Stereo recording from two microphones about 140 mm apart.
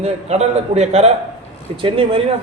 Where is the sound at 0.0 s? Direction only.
50° right (ahead or behind).